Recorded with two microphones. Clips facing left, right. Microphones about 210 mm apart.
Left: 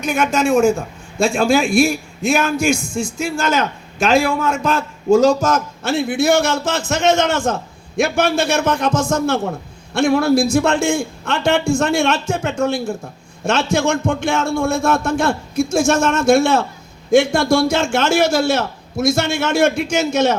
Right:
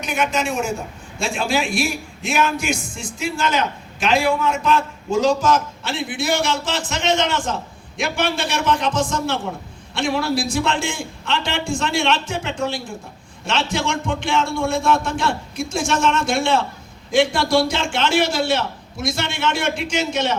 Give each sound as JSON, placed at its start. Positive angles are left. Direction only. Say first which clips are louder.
{"t": 0.0, "sound": "a man's voice", "louder": "left 5 dB", "side_deg": 45}